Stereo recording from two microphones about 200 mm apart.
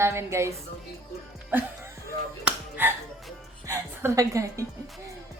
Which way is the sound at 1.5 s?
10° right (ahead or behind).